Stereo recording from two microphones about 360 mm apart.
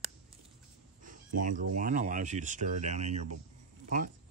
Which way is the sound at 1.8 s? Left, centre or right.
Right.